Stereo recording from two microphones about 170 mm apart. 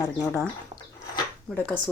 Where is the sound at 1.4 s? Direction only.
10° left (ahead or behind).